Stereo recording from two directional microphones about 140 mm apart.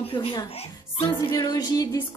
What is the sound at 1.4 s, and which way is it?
Music, 30° left (ahead or behind).